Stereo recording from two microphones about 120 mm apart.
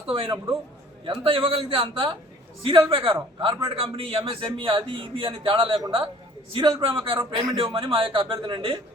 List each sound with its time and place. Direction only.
0.1 s a man's voice: 45° right (ahead or behind)